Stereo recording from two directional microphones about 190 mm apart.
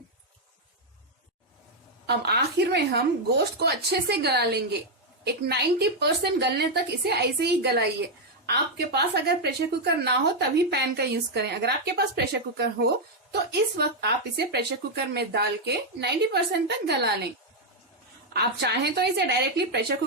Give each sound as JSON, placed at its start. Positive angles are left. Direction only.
{"t": 2.0, "sound": "a woman's voice", "side_deg": -60}
{"t": 18.3, "sound": "a woman's voice", "side_deg": -60}